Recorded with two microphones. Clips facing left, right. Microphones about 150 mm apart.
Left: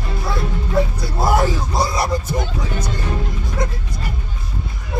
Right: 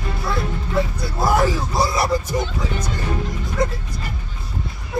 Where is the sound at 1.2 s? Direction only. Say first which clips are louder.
Even; 20° left (ahead or behind).